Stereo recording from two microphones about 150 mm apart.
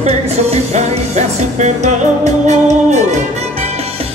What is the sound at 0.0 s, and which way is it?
Music, 45° right (ahead or behind).